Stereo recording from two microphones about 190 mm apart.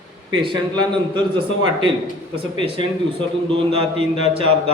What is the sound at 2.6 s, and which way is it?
A man's voice, 25° right (ahead or behind).